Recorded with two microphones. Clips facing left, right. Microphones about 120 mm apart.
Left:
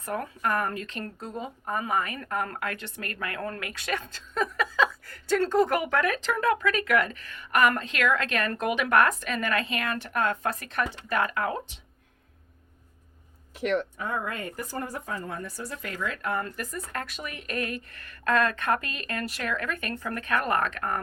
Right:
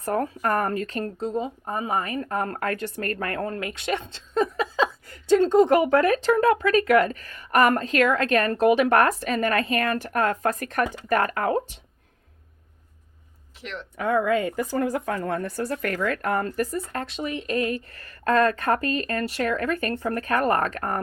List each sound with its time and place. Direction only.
0.0 s a woman's voice: 40° right (ahead or behind)
1.2 s a woman's voice: 25° right (ahead or behind)
3.5 s a woman's voice: 25° right (ahead or behind)
13.6 s speech: 55° left (ahead or behind)
13.9 s speech: 90° right; by 16.6 s 45° right (ahead or behind)
16.7 s a woman's voice: 30° right (ahead or behind)